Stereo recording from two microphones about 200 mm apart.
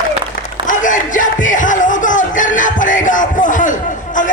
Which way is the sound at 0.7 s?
40° left (ahead or behind).